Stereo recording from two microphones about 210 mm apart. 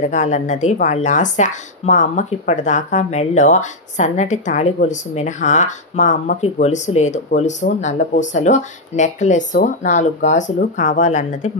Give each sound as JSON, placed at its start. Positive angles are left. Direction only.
{"t": 0.1, "sound": "speech", "side_deg": 35}